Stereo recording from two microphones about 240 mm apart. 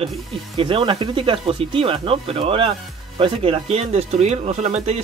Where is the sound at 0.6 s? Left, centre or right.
Right.